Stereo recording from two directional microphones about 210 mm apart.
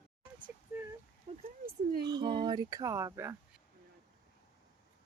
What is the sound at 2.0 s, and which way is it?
Speech, 20° right (ahead or behind).